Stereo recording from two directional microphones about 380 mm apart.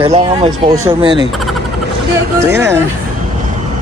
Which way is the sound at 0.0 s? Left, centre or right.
Centre.